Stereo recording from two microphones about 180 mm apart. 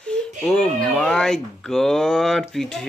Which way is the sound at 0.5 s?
5° left (ahead or behind).